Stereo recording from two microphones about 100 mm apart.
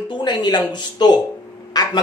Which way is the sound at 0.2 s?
45° left (ahead or behind).